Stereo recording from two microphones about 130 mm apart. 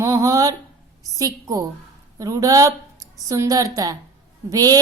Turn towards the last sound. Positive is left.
turn(degrees=-25)  # may be behind; listen again after turning